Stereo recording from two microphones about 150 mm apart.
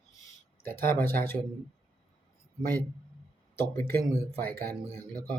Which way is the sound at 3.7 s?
10° left (ahead or behind).